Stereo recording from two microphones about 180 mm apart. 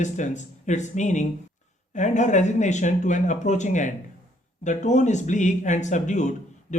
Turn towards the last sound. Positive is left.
turn(degrees=40)  # may be behind; listen again after turning